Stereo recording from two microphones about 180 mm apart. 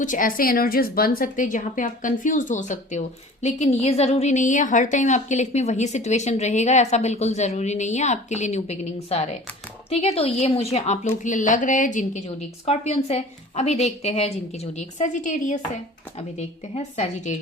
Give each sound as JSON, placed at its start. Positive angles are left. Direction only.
{"t": 0.0, "sound": "a woman's voice", "side_deg": 45}